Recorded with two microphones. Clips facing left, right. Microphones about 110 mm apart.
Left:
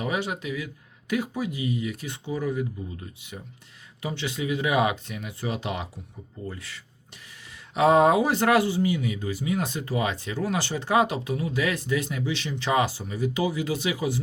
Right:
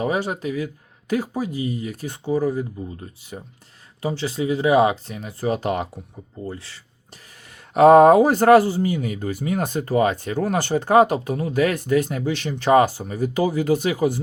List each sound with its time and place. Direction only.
0.0 s speech: 40° right (ahead or behind)
6.4 s speech: 30° right (ahead or behind)
7.7 s speech: 50° right (ahead or behind)